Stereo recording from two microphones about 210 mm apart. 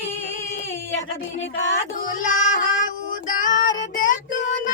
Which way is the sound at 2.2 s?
35° left (ahead or behind).